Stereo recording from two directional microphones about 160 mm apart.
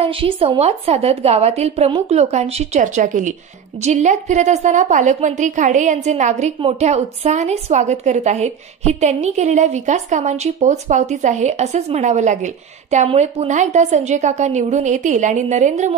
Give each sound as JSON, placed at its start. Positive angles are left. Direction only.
{"t": 0.0, "sound": "a woman's voice", "side_deg": -35}